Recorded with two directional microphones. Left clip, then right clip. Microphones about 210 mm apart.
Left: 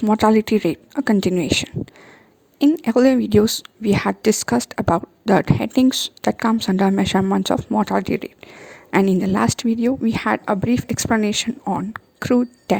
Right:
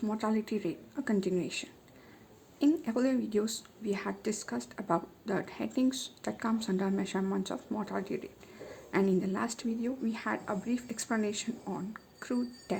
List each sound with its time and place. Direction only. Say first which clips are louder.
0.0 s a woman's voice: left 18 dB; 45° left (ahead or behind)